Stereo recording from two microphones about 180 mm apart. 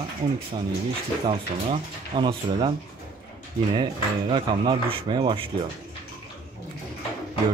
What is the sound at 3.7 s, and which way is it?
Speech, 30° right (ahead or behind).